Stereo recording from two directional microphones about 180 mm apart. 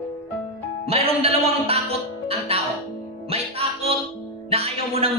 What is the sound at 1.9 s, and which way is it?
Music, 35° right (ahead or behind).